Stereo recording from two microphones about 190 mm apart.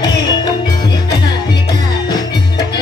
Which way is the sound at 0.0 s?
20° left (ahead or behind).